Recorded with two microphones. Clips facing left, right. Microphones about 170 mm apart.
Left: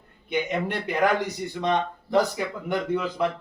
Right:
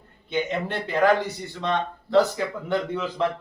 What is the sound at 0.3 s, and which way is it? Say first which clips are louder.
A man's voice: even; 15° left (ahead or behind).